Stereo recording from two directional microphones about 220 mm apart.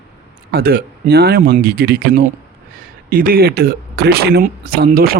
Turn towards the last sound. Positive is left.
turn(degrees=-40)  # may be behind; listen again after turning